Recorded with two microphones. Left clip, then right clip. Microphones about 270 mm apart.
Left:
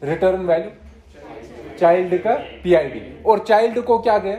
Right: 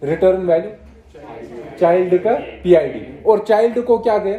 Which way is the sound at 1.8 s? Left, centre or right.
Left.